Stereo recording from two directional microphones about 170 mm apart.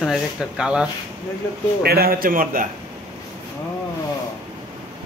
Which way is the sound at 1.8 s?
65° right (ahead or behind).